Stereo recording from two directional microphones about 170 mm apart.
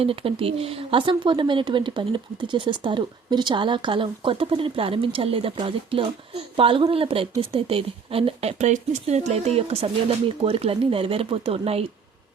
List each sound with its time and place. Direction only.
0.0 s a woman's voice: 35° right (ahead or behind)